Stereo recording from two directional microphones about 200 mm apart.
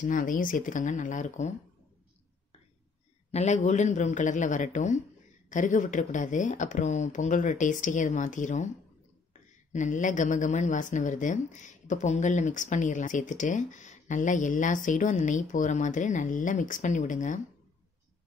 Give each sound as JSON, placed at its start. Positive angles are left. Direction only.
{"t": 0.0, "sound": "a woman's voice", "side_deg": 40}
{"t": 3.3, "sound": "a woman's voice", "side_deg": 35}